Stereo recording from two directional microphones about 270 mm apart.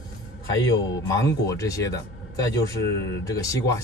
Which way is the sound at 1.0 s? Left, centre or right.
Centre.